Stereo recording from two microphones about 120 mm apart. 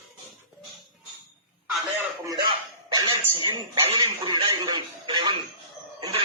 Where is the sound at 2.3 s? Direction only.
35° right (ahead or behind).